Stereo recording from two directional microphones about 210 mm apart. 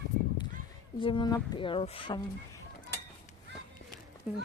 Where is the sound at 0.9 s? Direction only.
25° left (ahead or behind).